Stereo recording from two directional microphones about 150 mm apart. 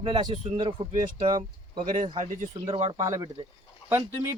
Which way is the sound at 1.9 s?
55° right (ahead or behind).